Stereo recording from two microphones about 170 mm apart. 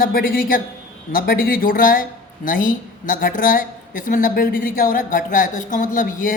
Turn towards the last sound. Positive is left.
turn(degrees=50)  # may be behind; listen again after turning